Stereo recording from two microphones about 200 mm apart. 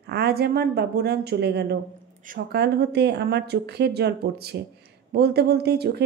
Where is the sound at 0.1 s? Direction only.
50° right (ahead or behind).